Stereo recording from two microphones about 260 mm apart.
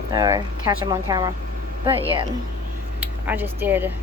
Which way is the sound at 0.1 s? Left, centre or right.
Centre.